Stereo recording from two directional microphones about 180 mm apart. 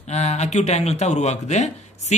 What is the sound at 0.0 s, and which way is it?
Speech, 40° left (ahead or behind).